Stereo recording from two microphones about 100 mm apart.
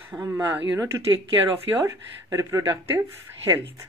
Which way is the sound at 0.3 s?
20° right (ahead or behind).